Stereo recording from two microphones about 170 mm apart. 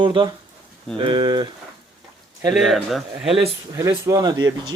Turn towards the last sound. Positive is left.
turn(degrees=-20)  # may be behind; listen again after turning